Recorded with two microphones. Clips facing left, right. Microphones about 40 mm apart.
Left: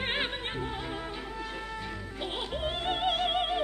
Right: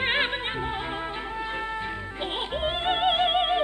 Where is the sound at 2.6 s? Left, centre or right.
Right.